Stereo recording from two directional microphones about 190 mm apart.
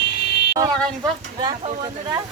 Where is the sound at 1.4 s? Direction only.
25° right (ahead or behind).